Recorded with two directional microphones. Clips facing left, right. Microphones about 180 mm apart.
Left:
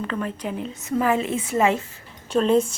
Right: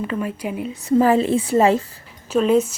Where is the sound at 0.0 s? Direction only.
10° right (ahead or behind).